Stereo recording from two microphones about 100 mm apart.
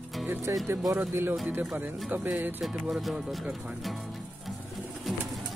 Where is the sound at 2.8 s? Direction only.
Centre (ahead or behind).